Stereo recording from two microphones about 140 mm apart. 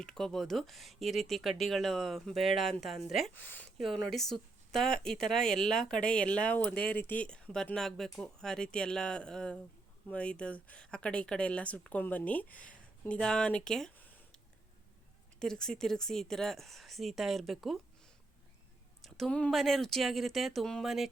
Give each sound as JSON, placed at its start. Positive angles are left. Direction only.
{"t": 0.0, "sound": "speech", "side_deg": 5}
{"t": 3.3, "sound": "speech", "side_deg": 15}
{"t": 3.8, "sound": "speech", "side_deg": 0}
{"t": 15.4, "sound": "speech", "side_deg": 5}
{"t": 19.0, "sound": "speech", "side_deg": 0}